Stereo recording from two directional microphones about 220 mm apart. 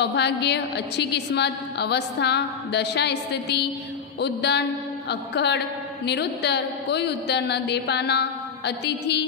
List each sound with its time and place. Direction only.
0.0 s a woman's voice: 50° left (ahead or behind)